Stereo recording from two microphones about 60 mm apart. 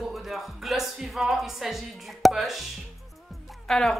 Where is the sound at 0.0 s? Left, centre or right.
Centre.